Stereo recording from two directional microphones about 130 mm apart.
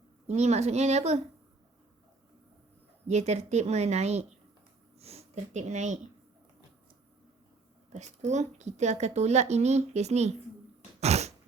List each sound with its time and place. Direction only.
0.3 s a woman's voice: 55° right (ahead or behind)
3.1 s a woman's voice: 60° right (ahead or behind)
7.9 s a woman's voice: 60° right (ahead or behind)
11.0 s a sound: 55° right (ahead or behind)